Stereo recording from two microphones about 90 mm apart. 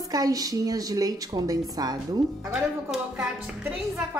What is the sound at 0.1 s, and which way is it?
A woman's voice, 45° right (ahead or behind).